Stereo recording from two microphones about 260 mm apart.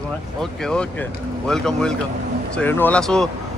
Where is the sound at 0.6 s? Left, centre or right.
Centre.